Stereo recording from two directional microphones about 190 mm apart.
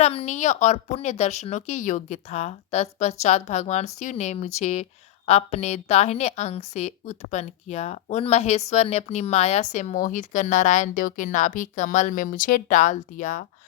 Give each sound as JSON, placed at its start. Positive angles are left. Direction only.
{"t": 0.0, "sound": "speech", "side_deg": 30}